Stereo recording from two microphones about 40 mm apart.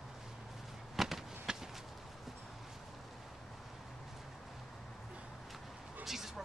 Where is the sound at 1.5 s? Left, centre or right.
Centre.